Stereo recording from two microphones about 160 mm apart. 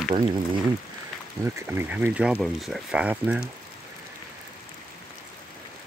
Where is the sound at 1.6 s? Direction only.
15° right (ahead or behind).